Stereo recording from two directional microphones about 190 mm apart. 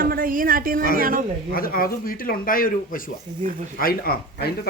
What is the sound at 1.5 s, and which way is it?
Speech, 50° left (ahead or behind).